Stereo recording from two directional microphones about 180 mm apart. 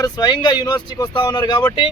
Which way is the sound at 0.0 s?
25° left (ahead or behind).